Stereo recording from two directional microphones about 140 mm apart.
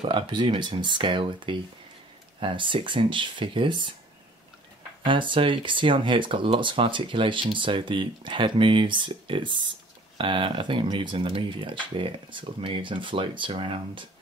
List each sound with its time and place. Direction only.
0.0 s speech: 35° right (ahead or behind)
5.0 s speech: 35° right (ahead or behind)